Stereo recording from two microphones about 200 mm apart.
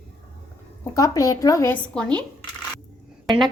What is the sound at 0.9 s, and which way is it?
A woman's voice, 15° left (ahead or behind).